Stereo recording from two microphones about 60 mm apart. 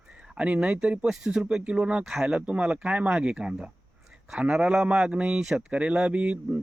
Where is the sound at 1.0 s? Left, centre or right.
Centre.